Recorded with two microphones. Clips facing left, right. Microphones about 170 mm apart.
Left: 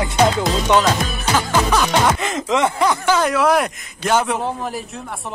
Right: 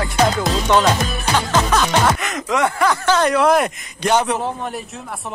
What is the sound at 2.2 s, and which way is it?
Speech, 25° left (ahead or behind).